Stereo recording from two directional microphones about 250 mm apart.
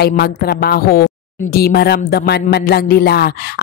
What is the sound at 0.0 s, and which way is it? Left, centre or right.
A woman's voice, left.